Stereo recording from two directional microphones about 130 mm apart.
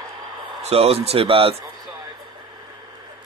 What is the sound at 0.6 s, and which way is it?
Speech, 50° right (ahead or behind).